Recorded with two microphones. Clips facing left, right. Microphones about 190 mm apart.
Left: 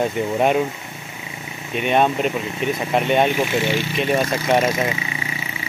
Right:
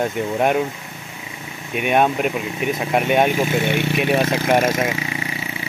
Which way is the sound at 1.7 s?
10° right (ahead or behind).